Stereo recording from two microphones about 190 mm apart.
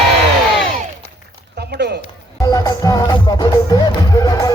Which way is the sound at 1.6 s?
60° right (ahead or behind).